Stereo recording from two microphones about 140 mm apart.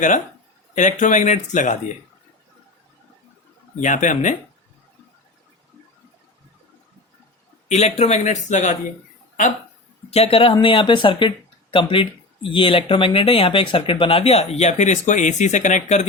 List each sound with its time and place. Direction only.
0.8 s speech: 65° left (ahead or behind)
3.8 s speech: 65° left (ahead or behind)
7.7 s speech: 50° left (ahead or behind)
10.1 s a man's voice: 45° left (ahead or behind)